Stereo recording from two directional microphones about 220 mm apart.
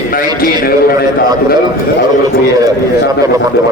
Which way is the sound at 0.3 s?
40° left (ahead or behind).